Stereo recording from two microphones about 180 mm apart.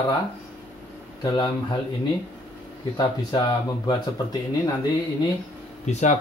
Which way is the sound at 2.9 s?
25° left (ahead or behind).